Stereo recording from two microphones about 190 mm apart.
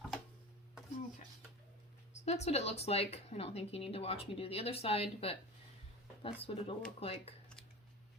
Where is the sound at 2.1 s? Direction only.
35° left (ahead or behind).